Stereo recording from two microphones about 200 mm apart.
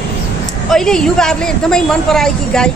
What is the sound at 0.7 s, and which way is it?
Speech, centre (ahead or behind).